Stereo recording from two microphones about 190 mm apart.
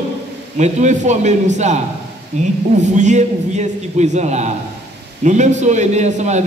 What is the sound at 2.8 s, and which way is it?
A man's voice, 40° right (ahead or behind).